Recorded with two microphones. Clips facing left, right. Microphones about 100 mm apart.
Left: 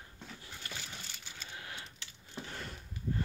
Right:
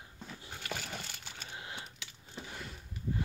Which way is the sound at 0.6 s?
60° right (ahead or behind).